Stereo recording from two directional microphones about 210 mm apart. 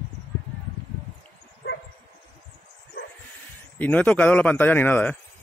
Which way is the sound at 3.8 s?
5° left (ahead or behind).